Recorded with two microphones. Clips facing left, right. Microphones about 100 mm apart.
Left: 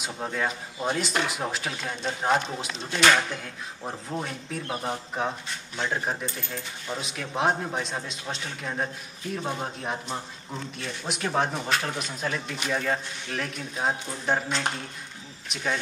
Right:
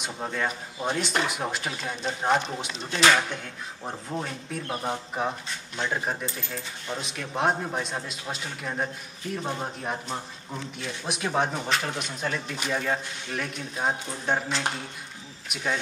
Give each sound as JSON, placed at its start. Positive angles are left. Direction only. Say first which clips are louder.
{"t": 0.0, "sound": "speech", "louder": "even", "side_deg": 0}